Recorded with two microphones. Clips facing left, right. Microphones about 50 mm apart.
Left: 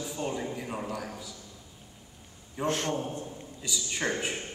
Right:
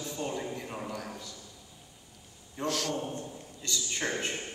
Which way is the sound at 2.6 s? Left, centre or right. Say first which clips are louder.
Left 2 dB; left.